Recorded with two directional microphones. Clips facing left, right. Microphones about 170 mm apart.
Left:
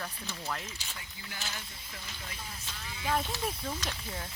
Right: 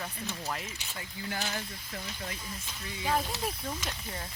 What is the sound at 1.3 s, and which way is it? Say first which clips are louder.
Speech: right 7 dB; 50° right (ahead or behind).